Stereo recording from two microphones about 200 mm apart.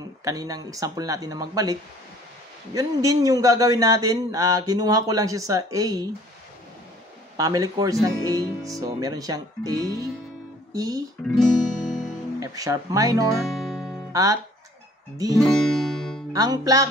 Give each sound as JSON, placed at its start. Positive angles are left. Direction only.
{"t": 0.2, "sound": "speech", "side_deg": -15}
{"t": 7.3, "sound": "speech", "side_deg": -15}
{"t": 11.2, "sound": "music", "side_deg": 0}
{"t": 12.4, "sound": "speech", "side_deg": -15}
{"t": 13.4, "sound": "music", "side_deg": 0}
{"t": 14.1, "sound": "speech", "side_deg": -15}
{"t": 15.4, "sound": "music", "side_deg": 5}
{"t": 16.3, "sound": "speech", "side_deg": -20}